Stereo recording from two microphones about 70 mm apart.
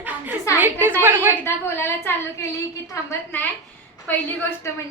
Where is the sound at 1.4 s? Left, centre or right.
Left.